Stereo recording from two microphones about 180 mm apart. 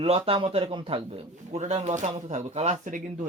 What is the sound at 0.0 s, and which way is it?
A man's voice, 30° right (ahead or behind).